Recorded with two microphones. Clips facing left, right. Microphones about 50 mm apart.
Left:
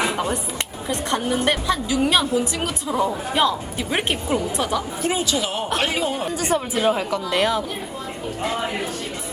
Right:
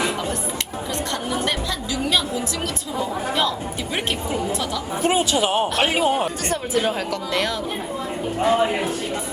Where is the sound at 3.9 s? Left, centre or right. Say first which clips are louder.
Left 3 dB; left.